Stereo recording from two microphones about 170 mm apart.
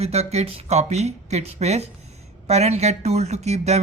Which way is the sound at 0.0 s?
40° right (ahead or behind).